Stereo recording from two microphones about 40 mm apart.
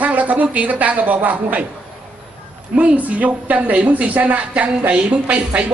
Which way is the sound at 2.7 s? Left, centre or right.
Right.